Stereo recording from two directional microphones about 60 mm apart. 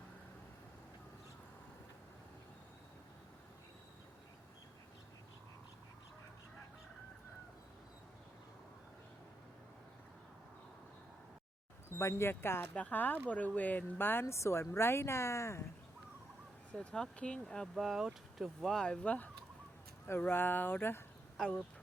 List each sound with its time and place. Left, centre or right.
11.9 s speech: left
12.7 s speech: left
14.3 s speech: left
16.7 s speech: centre
17.7 s speech: centre
18.6 s speech: centre
19.0 s speech: left
20.1 s speech: left
21.4 s speech: centre